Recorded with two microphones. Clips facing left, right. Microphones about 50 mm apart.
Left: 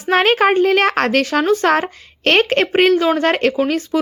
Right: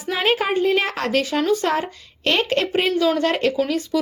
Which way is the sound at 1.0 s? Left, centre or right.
Left.